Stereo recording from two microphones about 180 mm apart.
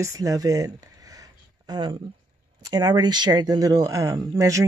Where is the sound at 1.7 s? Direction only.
25° right (ahead or behind).